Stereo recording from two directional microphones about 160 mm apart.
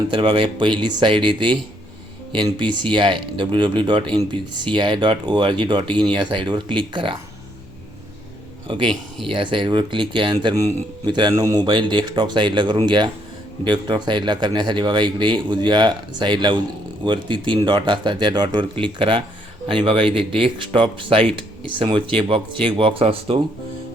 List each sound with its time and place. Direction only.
0.1 s speech: 35° right (ahead or behind)
8.6 s speech: 30° right (ahead or behind)